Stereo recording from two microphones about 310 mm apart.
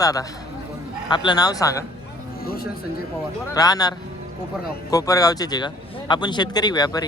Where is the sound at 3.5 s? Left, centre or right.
Centre.